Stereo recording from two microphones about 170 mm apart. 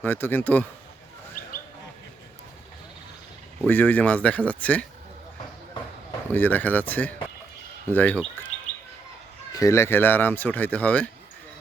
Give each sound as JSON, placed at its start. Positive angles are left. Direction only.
{"t": 0.0, "sound": "speech", "side_deg": 10}
{"t": 1.4, "sound": "a sound", "side_deg": 55}
{"t": 3.7, "sound": "speech", "side_deg": 10}
{"t": 6.2, "sound": "speech", "side_deg": 10}
{"t": 9.5, "sound": "speech", "side_deg": 20}